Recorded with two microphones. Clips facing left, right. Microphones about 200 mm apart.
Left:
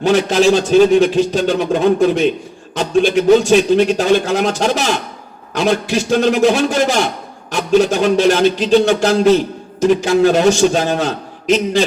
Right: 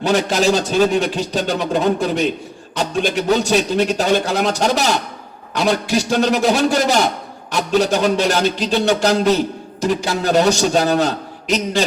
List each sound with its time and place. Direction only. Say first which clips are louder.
0.0 s speech: left 4 dB; 40° right (ahead or behind)
9.8 s speech: left 7 dB; 40° right (ahead or behind)